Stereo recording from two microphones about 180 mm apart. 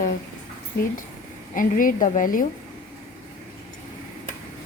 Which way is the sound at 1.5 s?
50° left (ahead or behind).